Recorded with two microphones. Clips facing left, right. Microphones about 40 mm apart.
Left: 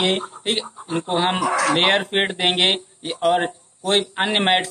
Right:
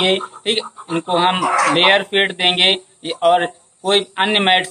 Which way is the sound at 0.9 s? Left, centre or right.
Right.